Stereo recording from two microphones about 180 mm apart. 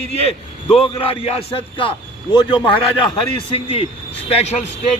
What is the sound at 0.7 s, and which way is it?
A man's voice, 30° left (ahead or behind).